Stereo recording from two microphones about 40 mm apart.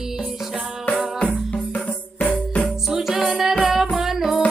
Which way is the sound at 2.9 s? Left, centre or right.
Centre.